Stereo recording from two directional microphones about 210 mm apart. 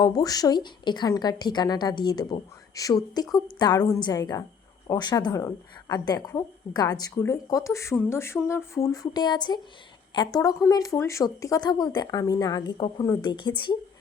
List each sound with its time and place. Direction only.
0.0 s a woman's voice: 20° left (ahead or behind)